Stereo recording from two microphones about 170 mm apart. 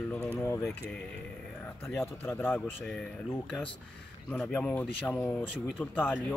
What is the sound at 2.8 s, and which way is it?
Speech, 5° left (ahead or behind).